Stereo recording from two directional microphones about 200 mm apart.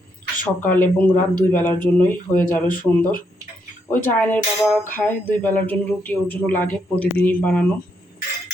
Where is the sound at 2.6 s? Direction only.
45° left (ahead or behind).